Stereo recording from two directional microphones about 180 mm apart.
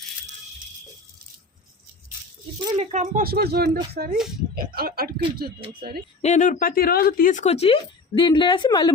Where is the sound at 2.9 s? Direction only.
45° right (ahead or behind).